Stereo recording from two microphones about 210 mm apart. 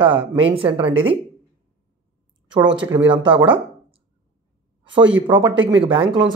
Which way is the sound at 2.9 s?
25° right (ahead or behind).